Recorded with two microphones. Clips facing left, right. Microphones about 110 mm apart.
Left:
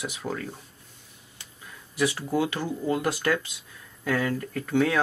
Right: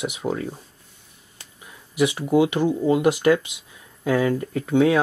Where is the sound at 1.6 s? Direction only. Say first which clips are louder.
Right 5 dB; 15° right (ahead or behind).